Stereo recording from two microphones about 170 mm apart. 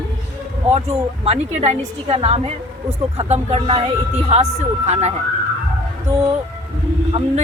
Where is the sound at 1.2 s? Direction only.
40° right (ahead or behind).